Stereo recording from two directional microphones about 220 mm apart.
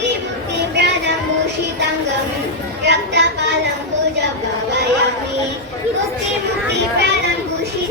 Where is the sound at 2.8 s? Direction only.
50° right (ahead or behind).